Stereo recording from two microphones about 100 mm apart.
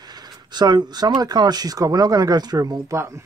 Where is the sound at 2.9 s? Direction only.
25° right (ahead or behind).